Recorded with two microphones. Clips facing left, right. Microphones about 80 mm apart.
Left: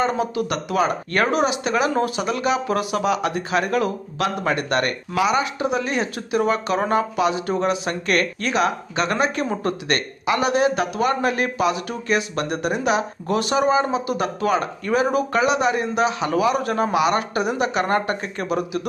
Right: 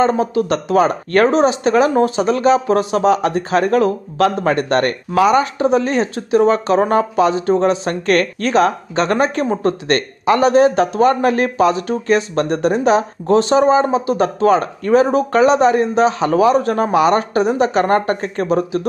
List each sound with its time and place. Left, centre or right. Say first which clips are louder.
0.0 s speech: right 6 dB; right